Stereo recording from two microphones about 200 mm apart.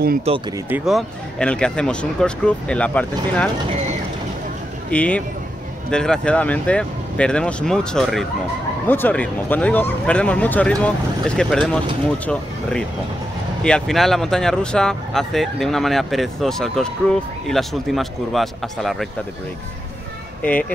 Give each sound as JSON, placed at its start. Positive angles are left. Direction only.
{"t": 0.3, "sound": "speech", "side_deg": -30}
{"t": 0.7, "sound": "speech", "side_deg": -5}
{"t": 4.9, "sound": "speech", "side_deg": 5}